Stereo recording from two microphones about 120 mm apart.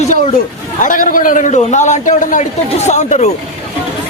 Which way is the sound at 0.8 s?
90° left.